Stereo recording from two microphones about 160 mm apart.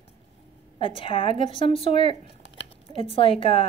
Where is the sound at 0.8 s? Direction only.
35° left (ahead or behind).